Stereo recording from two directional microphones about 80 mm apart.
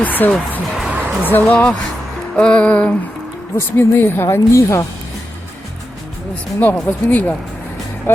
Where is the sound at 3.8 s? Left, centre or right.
Left.